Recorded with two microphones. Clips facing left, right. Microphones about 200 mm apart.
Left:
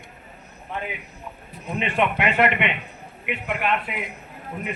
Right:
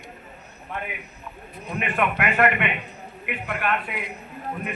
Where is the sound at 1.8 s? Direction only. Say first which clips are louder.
Left 2 dB; 25° left (ahead or behind).